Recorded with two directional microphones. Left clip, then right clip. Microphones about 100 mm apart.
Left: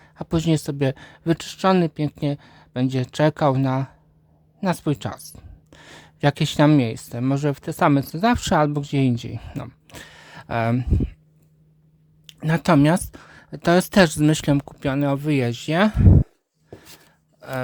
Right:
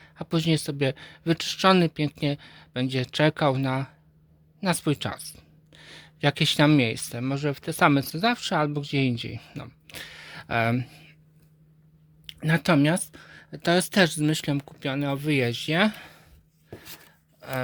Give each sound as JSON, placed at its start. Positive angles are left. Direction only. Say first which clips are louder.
{"t": 0.0, "sound": "speech", "louder": "left 3 dB", "side_deg": 40}
{"t": 1.5, "sound": "speech", "louder": "even", "side_deg": 25}
{"t": 5.2, "sound": "speech", "louder": "even", "side_deg": 45}
{"t": 5.7, "sound": "speech", "louder": "left 2 dB", "side_deg": 55}
{"t": 7.3, "sound": "speech", "louder": "left 5 dB", "side_deg": 50}
{"t": 7.8, "sound": "speech", "louder": "left 2 dB", "side_deg": 30}
{"t": 8.5, "sound": "speech", "louder": "left 5 dB", "side_deg": 55}
{"t": 9.5, "sound": "speech", "louder": "left 6 dB", "side_deg": 60}
{"t": 9.8, "sound": "a sound", "louder": "right 1 dB", "side_deg": 40}
{"t": 12.2, "sound": "a sound", "louder": "left 1 dB", "side_deg": 25}
{"t": 12.6, "sound": "speech", "louder": "left 6 dB", "side_deg": 60}
{"t": 13.2, "sound": "speech", "louder": "left 4 dB", "side_deg": 50}
{"t": 16.6, "sound": "a sound", "louder": "left 1 dB", "side_deg": 25}